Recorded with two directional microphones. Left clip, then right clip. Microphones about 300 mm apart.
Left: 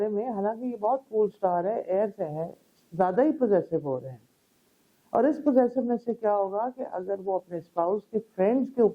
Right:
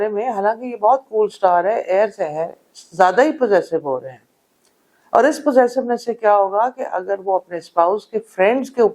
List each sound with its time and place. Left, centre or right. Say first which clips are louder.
0.0 s speech: right 10 dB; centre